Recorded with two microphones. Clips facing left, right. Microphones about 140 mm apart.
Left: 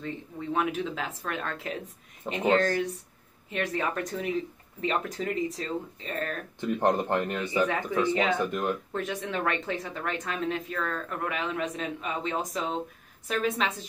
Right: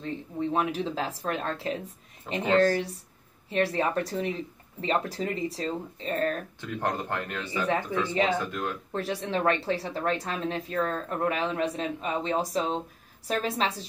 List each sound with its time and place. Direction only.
0.0 s speech: 30° right (ahead or behind)
2.3 s speech: 20° left (ahead or behind)
2.6 s speech: 35° right (ahead or behind)
6.6 s speech: 20° left (ahead or behind)
8.9 s speech: 35° right (ahead or behind)